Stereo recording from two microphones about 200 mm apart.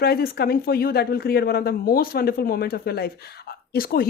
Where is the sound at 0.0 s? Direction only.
50° left (ahead or behind).